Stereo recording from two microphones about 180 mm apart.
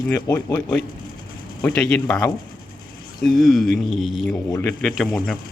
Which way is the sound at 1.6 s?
5° left (ahead or behind).